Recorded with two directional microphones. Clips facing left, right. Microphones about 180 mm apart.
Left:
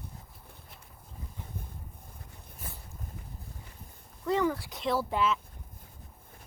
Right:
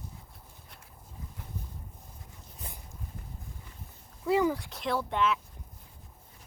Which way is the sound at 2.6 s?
20° right (ahead or behind).